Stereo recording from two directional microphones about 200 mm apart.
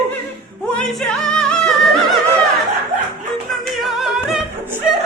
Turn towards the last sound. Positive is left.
turn(degrees=-5)  # may be behind; listen again after turning